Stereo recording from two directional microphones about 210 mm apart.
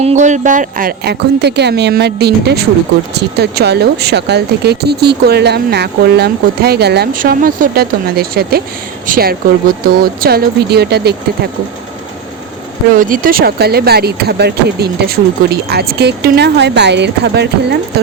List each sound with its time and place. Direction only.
0.0 s speech: 35° right (ahead or behind); by 11.1 s 50° right (ahead or behind)
13.0 s speech: 40° right (ahead or behind)